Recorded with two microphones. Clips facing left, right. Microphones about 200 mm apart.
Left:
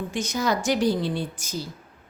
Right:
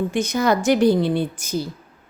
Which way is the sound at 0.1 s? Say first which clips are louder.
Right 6 dB; 55° right (ahead or behind).